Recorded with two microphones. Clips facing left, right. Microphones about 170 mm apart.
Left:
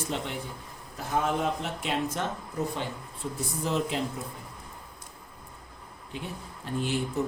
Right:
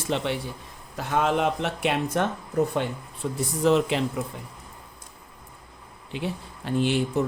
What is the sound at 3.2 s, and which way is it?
Speech, 80° right.